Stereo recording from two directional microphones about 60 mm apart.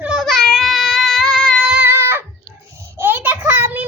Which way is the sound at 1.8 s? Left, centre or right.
Right.